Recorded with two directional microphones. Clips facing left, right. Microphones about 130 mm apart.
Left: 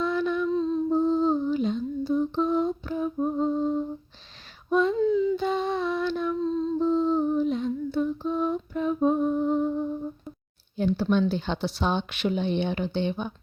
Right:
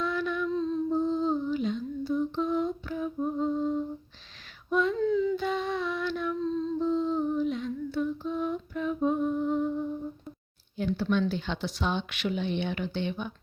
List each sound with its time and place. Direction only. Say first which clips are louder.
0.0 s female singing: left 4 dB; 30° left (ahead or behind)
0.9 s lullaby: left 5 dB; 30° left (ahead or behind)
4.7 s female singing: left 4 dB; 35° left (ahead or behind)
4.9 s female singing: left 3 dB; 15° left (ahead or behind)
5.4 s humming: left 4 dB; 30° left (ahead or behind)
10.8 s speech: left 4 dB; 30° left (ahead or behind)